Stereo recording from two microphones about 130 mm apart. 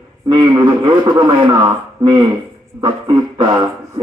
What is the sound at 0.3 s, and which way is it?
A man's voice, 35° right (ahead or behind).